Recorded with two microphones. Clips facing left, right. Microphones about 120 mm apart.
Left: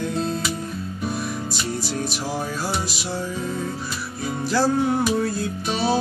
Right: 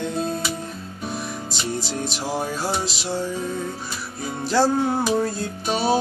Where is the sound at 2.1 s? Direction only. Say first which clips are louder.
Right 1 dB; 25° right (ahead or behind).